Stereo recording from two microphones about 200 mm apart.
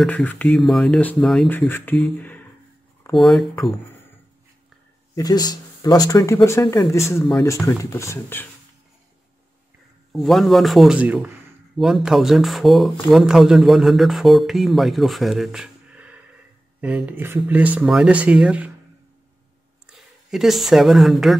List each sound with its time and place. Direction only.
0.0 s speech: 5° left (ahead or behind)
5.1 s speech: 20° left (ahead or behind)
10.1 s speech: centre (ahead or behind)
19.9 s speech: centre (ahead or behind)